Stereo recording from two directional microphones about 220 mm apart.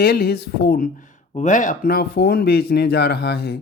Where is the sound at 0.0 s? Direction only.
45° left (ahead or behind).